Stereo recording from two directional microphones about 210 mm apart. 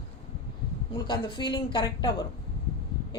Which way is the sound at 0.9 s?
20° left (ahead or behind).